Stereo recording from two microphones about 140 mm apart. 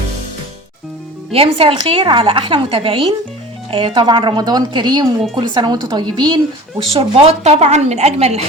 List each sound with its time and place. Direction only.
1.3 s a woman's voice: 40° right (ahead or behind)
6.9 s a woman's voice: 45° right (ahead or behind)